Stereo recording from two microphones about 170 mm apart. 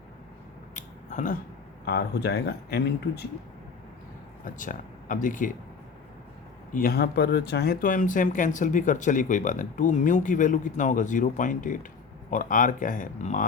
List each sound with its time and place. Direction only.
0.7 s a sound: 45° left (ahead or behind)
1.8 s speech: 75° left (ahead or behind)
4.4 s speech: 50° left (ahead or behind)
6.7 s speech: 65° left (ahead or behind)